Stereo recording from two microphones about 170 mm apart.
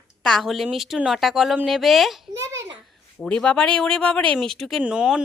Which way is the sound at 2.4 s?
15° right (ahead or behind).